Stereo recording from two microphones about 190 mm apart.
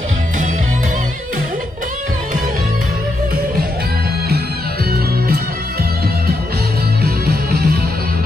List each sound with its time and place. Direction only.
7.0 s music: 55° right (ahead or behind)